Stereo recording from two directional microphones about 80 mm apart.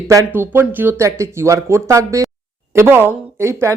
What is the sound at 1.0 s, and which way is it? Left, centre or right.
A woman's voice, right.